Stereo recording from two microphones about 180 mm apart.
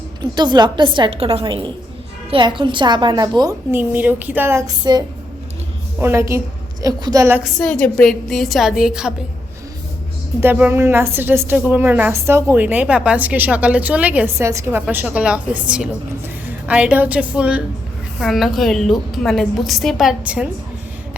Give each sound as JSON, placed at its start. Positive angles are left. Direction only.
{"t": 0.2, "sound": "a woman's voice", "side_deg": -25}
{"t": 7.6, "sound": "a woman's voice", "side_deg": 5}
{"t": 10.4, "sound": "a woman's voice", "side_deg": -10}